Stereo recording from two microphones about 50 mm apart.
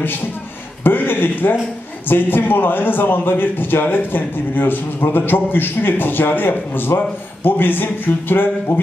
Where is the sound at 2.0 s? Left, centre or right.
Left.